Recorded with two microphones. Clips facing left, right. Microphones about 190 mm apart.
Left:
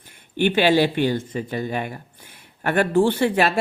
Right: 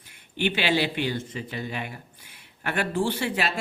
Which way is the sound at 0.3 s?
50° left (ahead or behind).